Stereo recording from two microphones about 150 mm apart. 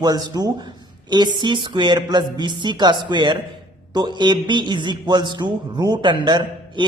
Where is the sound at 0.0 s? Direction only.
30° right (ahead or behind).